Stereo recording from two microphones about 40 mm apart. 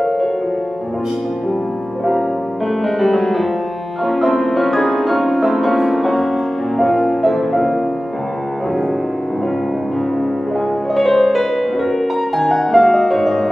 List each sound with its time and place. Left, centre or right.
3.0 s music: centre
11.0 s harp: centre
12.4 s music: centre